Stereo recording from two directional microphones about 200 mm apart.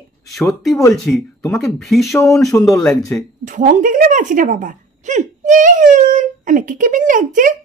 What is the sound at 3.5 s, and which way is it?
A woman's voice, 40° right (ahead or behind).